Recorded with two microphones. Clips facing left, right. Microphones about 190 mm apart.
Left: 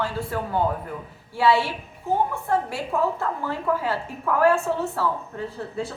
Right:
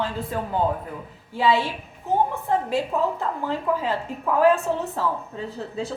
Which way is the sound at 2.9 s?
20° right (ahead or behind).